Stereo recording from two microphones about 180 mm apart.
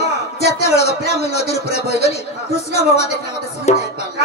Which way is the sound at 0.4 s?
35° left (ahead or behind).